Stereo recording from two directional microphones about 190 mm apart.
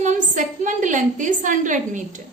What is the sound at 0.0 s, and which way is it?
A woman's voice, 40° right (ahead or behind).